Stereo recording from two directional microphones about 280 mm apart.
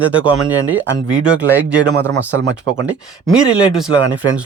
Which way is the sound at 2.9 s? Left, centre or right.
Centre.